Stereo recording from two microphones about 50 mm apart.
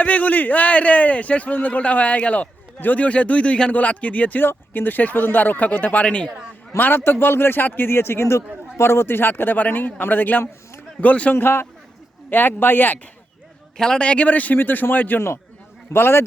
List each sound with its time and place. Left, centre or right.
0.0 s speech: left
6.7 s a man's voice: left
8.8 s speech: left
11.3 s a man's voice: left
13.7 s a man's voice: centre
14.0 s speech: left
15.9 s a man's voice: left